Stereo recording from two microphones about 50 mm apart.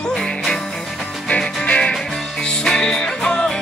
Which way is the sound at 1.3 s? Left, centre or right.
Left.